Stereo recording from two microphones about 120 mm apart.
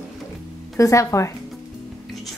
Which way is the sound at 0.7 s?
25° left (ahead or behind).